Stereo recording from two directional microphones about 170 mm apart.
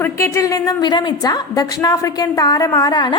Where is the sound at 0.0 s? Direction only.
15° left (ahead or behind).